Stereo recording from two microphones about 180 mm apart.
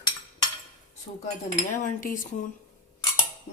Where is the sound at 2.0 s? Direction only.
45° left (ahead or behind).